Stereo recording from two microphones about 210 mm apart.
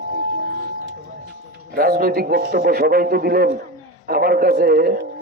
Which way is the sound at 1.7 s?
45° right (ahead or behind).